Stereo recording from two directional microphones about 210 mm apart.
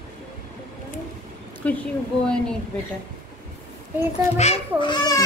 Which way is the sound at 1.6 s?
5° left (ahead or behind).